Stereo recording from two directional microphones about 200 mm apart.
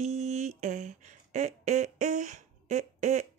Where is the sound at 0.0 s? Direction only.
35° right (ahead or behind).